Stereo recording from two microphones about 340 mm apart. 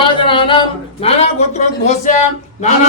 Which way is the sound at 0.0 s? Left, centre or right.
Centre.